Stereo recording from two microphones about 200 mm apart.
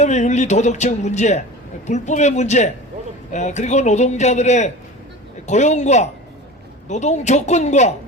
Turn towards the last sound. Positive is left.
turn(degrees=35)  # may be behind; listen again after turning